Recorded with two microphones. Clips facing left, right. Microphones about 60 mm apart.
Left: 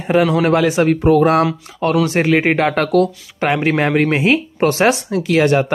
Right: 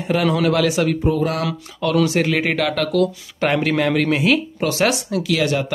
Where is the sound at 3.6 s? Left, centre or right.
Left.